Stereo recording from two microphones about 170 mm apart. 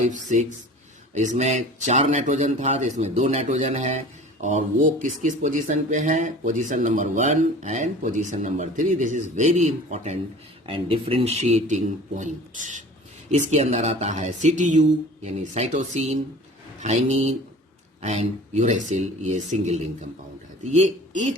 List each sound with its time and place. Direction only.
0.0 s a man's voice: 45° right (ahead or behind)